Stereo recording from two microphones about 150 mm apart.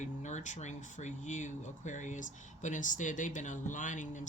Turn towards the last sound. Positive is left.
turn(degrees=55)  # may be behind; listen again after turning